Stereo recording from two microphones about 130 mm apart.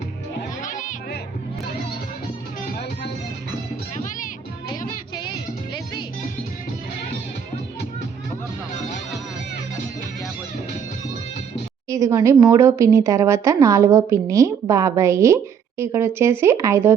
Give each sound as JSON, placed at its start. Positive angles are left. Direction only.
{"t": 0.6, "sound": "music", "side_deg": 80}
{"t": 5.1, "sound": "music", "side_deg": 35}
{"t": 11.9, "sound": "speech", "side_deg": -25}